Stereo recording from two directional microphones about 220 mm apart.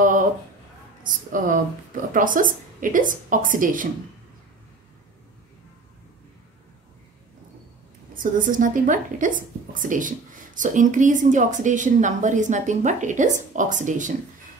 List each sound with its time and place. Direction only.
1.0 s a woman's voice: 35° right (ahead or behind)
8.1 s a woman's voice: 40° right (ahead or behind)